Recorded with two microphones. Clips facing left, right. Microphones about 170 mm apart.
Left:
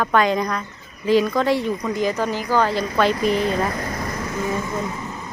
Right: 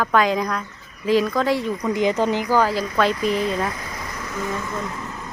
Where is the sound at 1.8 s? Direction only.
20° right (ahead or behind).